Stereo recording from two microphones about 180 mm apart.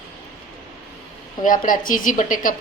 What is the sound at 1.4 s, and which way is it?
A woman's voice, 50° left (ahead or behind).